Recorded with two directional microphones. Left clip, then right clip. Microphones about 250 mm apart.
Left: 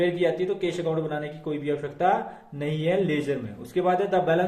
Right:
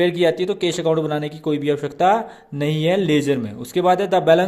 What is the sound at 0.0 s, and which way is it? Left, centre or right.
Speech, right.